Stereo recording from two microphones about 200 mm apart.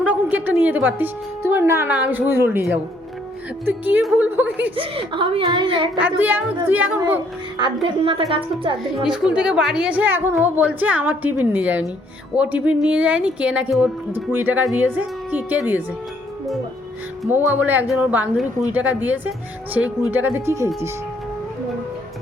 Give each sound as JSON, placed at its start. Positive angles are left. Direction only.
{"t": 0.0, "sound": "speech", "side_deg": -10}
{"t": 3.7, "sound": "speech", "side_deg": -10}
{"t": 4.8, "sound": "a woman's voice", "side_deg": -25}
{"t": 6.0, "sound": "speech", "side_deg": -10}
{"t": 7.6, "sound": "a woman's voice", "side_deg": -25}
{"t": 9.0, "sound": "speech", "side_deg": -5}
{"t": 17.5, "sound": "speech", "side_deg": -10}